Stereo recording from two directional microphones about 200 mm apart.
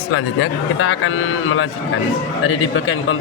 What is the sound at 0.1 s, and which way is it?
A man's voice, 85° left.